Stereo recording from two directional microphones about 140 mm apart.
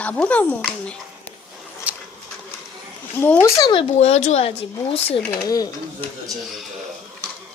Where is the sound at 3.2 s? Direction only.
10° left (ahead or behind).